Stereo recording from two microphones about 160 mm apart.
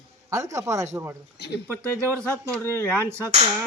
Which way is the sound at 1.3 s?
90° left.